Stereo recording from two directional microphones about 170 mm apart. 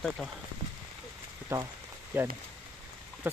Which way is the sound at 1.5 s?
15° right (ahead or behind).